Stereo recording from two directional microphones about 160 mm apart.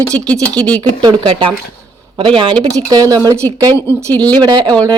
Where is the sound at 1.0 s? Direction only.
30° right (ahead or behind).